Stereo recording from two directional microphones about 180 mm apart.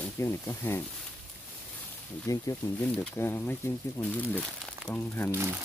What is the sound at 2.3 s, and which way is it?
Speech, 20° left (ahead or behind).